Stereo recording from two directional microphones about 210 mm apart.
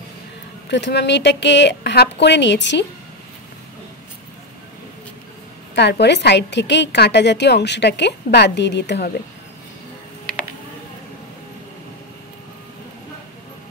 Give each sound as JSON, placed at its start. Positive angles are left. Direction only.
{"t": 0.7, "sound": "a woman's voice", "side_deg": 55}
{"t": 5.8, "sound": "a woman's voice", "side_deg": 55}